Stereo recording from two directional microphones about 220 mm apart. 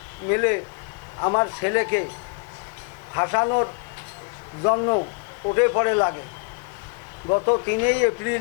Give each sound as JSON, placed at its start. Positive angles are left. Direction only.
{"t": 0.3, "sound": "speech", "side_deg": 15}
{"t": 3.2, "sound": "speech", "side_deg": 20}
{"t": 7.3, "sound": "speech", "side_deg": 25}
{"t": 7.7, "sound": "speech", "side_deg": 15}